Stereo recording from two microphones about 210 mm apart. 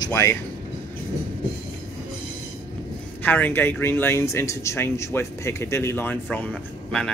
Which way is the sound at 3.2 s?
10° left (ahead or behind).